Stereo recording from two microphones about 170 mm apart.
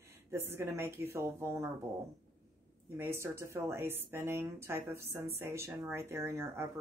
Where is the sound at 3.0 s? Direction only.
15° right (ahead or behind).